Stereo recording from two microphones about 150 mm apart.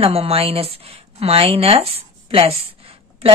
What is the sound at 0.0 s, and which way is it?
Speech, 40° right (ahead or behind).